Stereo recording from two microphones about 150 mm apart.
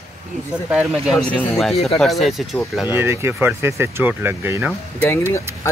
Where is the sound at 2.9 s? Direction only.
15° right (ahead or behind).